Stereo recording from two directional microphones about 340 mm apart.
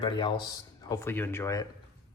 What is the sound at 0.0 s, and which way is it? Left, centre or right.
Speech, centre.